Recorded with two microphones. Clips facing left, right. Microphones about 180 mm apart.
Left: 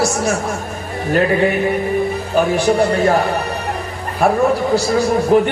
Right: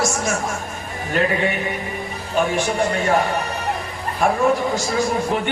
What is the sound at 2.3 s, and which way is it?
Speech, 35° left (ahead or behind).